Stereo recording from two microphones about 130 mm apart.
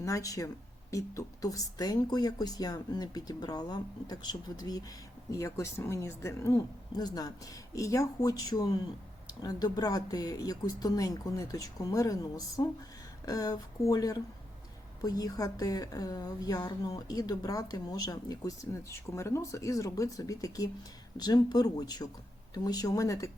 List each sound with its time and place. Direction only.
0.0 s a woman's voice: 25° left (ahead or behind)